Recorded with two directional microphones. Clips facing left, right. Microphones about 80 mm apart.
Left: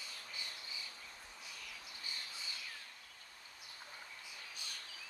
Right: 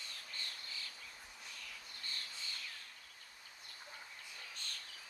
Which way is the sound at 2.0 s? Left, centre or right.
Centre.